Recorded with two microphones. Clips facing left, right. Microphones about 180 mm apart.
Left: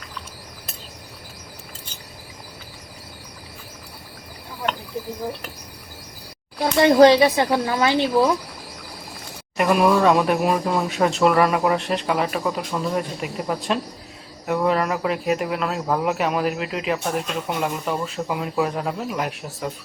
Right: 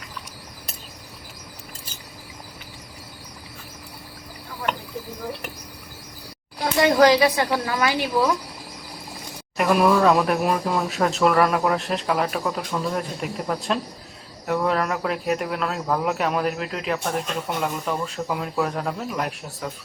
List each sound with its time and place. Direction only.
6.7 s speech: 25° left (ahead or behind)
9.6 s speech: centre (ahead or behind)